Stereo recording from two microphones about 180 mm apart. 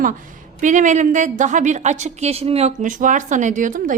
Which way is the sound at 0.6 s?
45° right (ahead or behind).